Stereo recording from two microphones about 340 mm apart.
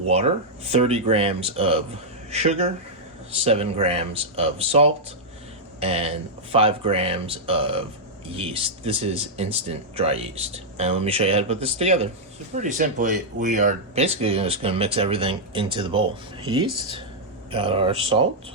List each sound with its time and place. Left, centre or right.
0.1 s speech: centre
17.5 s speech: centre